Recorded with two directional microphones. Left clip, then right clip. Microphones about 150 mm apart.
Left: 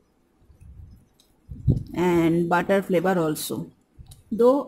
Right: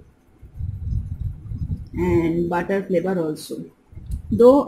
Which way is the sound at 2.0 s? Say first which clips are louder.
Right 1 dB; 35° left (ahead or behind).